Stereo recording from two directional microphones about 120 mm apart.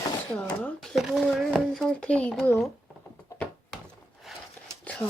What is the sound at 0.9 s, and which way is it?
Speech, 5° right (ahead or behind).